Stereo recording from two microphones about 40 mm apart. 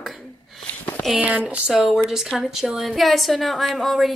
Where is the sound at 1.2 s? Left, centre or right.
Right.